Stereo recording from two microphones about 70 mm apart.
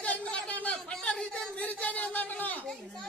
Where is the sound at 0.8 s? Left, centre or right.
Centre.